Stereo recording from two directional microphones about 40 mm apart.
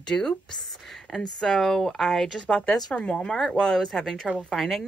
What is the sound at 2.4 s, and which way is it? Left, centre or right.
Speech, left.